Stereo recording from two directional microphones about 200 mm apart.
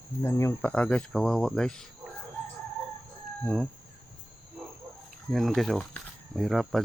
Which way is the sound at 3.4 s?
Centre (ahead or behind).